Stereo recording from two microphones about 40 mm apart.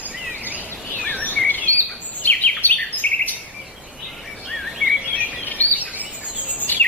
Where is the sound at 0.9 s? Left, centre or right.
Left.